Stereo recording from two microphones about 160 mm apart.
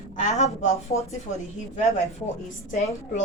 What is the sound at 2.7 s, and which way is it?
Speech, 50° left (ahead or behind).